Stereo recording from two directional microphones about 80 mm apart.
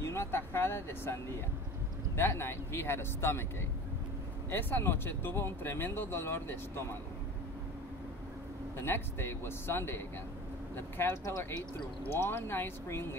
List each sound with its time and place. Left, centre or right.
0.0 s speech: left
4.5 s speech: left
8.7 s speech: left